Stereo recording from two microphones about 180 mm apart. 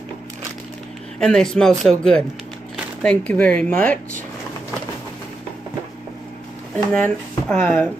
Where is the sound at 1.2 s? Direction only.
5° left (ahead or behind).